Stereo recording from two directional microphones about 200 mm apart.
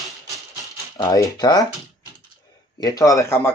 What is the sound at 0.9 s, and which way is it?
Speech, 20° left (ahead or behind).